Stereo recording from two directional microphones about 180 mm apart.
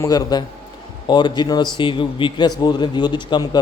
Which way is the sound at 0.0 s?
20° left (ahead or behind).